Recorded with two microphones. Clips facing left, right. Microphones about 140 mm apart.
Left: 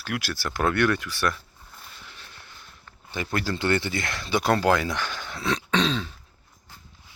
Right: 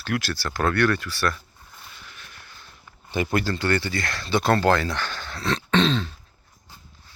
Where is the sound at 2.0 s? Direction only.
30° left (ahead or behind).